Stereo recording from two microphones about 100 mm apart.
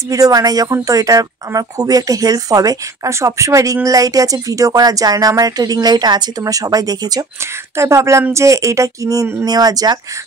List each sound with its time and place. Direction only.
0.1 s speech: 35° right (ahead or behind)
7.7 s speech: 30° right (ahead or behind)